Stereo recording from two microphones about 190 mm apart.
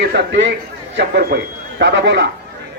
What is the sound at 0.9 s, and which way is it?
Speech, 55° right (ahead or behind).